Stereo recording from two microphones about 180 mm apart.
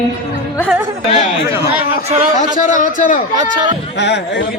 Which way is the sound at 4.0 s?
70° left (ahead or behind).